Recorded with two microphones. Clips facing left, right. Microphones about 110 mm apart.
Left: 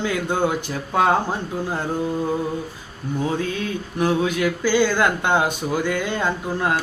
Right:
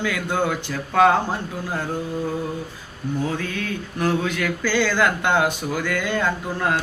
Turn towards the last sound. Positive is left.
turn(degrees=20)  # may be behind; listen again after turning